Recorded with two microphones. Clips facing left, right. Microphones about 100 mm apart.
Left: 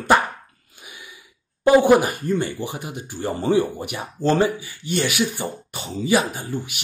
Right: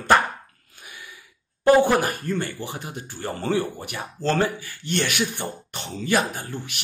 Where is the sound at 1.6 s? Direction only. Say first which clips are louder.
Left 3 dB; 15° left (ahead or behind).